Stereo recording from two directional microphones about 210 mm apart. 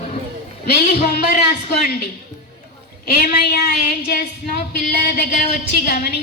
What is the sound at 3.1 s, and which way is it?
A woman's voice, 45° left (ahead or behind).